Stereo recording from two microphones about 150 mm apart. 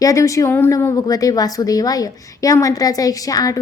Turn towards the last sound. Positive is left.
turn(degrees=25)  # may be behind; listen again after turning